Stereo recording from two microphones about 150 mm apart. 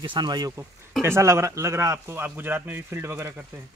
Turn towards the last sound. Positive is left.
turn(degrees=-15)  # may be behind; listen again after turning